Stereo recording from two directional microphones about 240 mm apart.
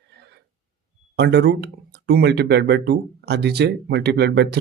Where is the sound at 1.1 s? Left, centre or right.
Right.